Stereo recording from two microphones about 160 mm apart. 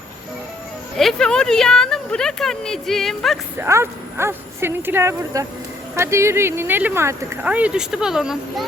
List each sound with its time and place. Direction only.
0.9 s speech: 5° left (ahead or behind)
3.6 s speech: 15° right (ahead or behind)